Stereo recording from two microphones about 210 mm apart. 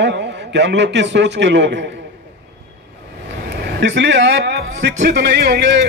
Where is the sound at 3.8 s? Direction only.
60° right (ahead or behind).